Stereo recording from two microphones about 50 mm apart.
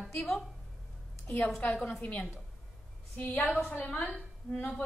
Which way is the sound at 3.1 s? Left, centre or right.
Left.